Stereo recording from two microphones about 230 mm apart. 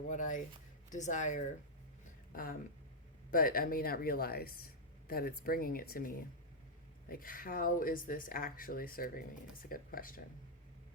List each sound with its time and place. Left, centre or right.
0.1 s speech: left